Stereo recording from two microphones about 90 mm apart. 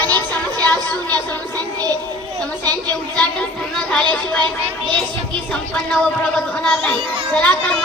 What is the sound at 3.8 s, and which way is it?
Speech, 15° left (ahead or behind).